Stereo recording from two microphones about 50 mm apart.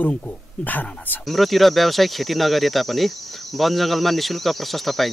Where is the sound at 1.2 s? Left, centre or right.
Centre.